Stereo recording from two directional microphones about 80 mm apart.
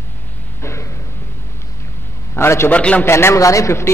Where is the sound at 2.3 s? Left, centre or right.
Left.